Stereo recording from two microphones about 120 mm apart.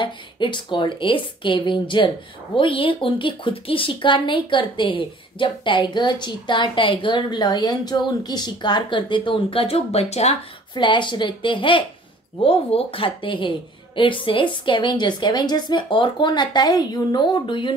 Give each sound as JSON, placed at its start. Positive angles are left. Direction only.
{"t": 0.0, "sound": "speech", "side_deg": 40}
{"t": 10.7, "sound": "a woman's voice", "side_deg": 40}